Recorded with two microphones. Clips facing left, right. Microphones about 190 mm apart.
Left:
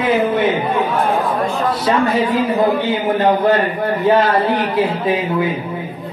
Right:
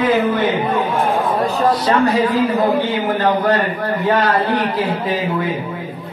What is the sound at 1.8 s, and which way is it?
A man's voice, 25° left (ahead or behind).